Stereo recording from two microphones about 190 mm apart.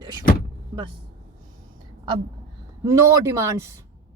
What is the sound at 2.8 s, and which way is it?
Speech, 15° right (ahead or behind).